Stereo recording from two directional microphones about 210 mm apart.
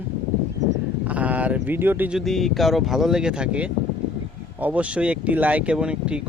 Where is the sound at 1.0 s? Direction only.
5° right (ahead or behind).